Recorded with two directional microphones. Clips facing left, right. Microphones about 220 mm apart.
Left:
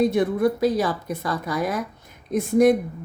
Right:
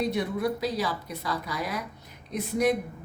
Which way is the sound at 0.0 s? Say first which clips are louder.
Left 8 dB; 50° left (ahead or behind).